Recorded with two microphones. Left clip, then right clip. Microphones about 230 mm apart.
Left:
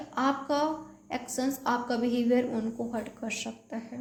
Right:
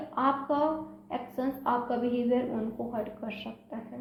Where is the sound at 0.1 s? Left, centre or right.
Left.